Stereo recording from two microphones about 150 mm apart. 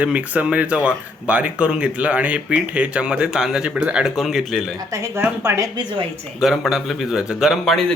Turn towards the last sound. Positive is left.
turn(degrees=5)  # may be behind; listen again after turning